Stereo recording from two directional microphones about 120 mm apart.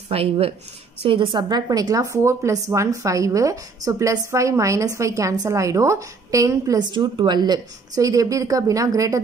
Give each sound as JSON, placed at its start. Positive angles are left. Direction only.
{"t": 0.1, "sound": "a woman's voice", "side_deg": -55}